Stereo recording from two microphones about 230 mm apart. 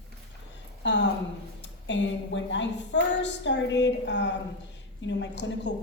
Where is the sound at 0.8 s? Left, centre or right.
Left.